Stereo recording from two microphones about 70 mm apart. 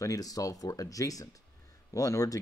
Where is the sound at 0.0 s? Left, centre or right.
Left.